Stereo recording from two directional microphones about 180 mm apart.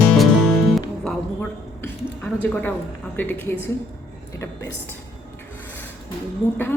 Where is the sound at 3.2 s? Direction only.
10° left (ahead or behind).